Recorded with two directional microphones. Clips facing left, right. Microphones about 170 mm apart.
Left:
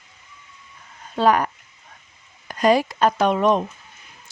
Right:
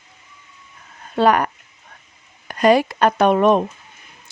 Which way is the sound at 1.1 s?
65° right (ahead or behind).